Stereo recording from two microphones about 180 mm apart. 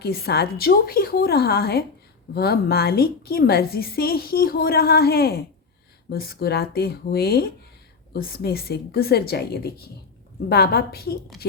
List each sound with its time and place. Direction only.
0.0 s a woman's voice: 60° left (ahead or behind)